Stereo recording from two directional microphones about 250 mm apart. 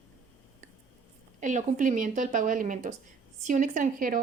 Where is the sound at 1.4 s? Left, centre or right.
Right.